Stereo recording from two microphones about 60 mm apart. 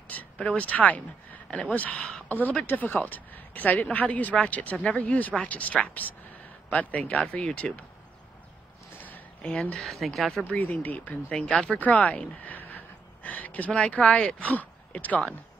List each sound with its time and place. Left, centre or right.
0.1 s a sound: left
0.5 s speech: left
9.4 s speech: centre
9.8 s speech: centre
10.5 s speech: left